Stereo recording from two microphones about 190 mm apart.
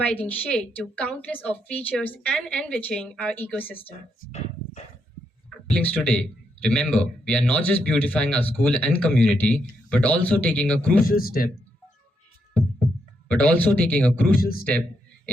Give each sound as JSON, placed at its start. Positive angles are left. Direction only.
{"t": 0.0, "sound": "speech", "side_deg": 5}
{"t": 3.8, "sound": "speech", "side_deg": 35}
{"t": 5.7, "sound": "speech", "side_deg": 5}
{"t": 11.0, "sound": "speech", "side_deg": 50}
{"t": 13.2, "sound": "speech", "side_deg": 5}